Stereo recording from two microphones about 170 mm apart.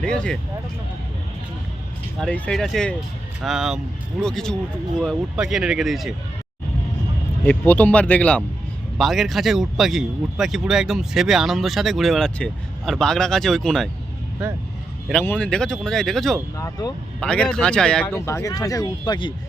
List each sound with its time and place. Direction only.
0.0 s speech: 5° left (ahead or behind)
2.1 s speech: 5° left (ahead or behind)
7.4 s speech: 10° left (ahead or behind)
15.1 s speech: 10° left (ahead or behind)
16.6 s speech: 20° left (ahead or behind)
17.2 s speech: 5° left (ahead or behind); by 19.3 s 25° left (ahead or behind)